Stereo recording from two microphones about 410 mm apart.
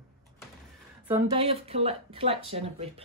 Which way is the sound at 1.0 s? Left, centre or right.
Centre.